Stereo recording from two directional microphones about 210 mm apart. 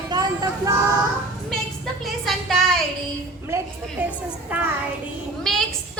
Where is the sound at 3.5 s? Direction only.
10° right (ahead or behind).